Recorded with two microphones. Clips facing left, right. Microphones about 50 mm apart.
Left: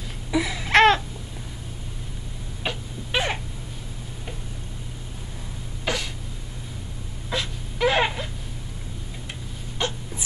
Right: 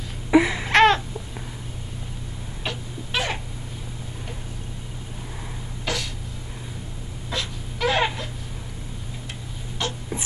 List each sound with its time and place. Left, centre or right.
0.3 s a sound: right
0.7 s babbling: centre
2.6 s cat: centre
5.9 s a sound: centre
7.2 s wail: centre
9.8 s dog: left